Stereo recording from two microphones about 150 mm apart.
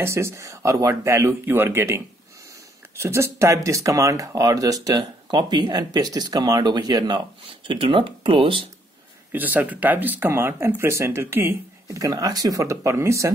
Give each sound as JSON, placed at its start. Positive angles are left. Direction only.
{"t": 0.0, "sound": "speech", "side_deg": -20}
{"t": 9.3, "sound": "speech", "side_deg": -10}